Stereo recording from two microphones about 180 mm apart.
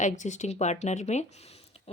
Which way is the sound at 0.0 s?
40° left (ahead or behind).